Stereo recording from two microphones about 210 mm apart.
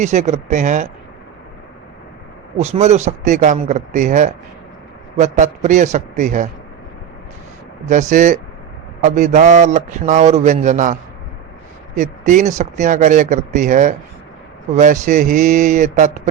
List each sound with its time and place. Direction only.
0.0 s a man's voice: 35° right (ahead or behind)
2.6 s a man's voice: 30° right (ahead or behind)
7.9 s a man's voice: 35° right (ahead or behind)
11.9 s a man's voice: 35° right (ahead or behind)